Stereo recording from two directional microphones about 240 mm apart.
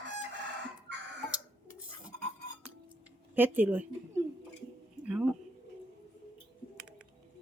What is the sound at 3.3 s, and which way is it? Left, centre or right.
Speech, centre.